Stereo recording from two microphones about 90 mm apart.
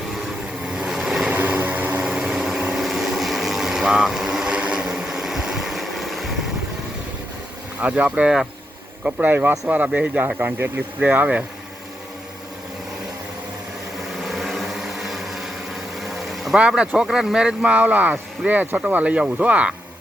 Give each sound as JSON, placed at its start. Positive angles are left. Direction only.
{"t": 0.6, "sound": "vehicle", "side_deg": -10}
{"t": 1.3, "sound": "vehicle", "side_deg": -20}
{"t": 7.8, "sound": "speech", "side_deg": -15}
{"t": 14.2, "sound": "vehicle", "side_deg": 0}
{"t": 16.0, "sound": "a sound", "side_deg": 0}
{"t": 16.6, "sound": "speech", "side_deg": -10}